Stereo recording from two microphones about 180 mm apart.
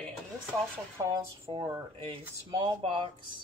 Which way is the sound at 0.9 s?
15° right (ahead or behind).